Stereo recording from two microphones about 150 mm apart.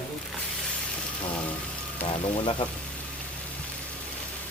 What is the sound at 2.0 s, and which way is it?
Speech, 35° left (ahead or behind).